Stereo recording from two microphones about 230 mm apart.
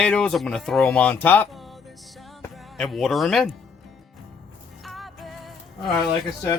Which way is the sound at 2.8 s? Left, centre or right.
Centre.